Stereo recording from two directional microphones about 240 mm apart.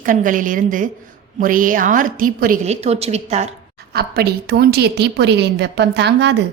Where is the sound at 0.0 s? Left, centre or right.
Right.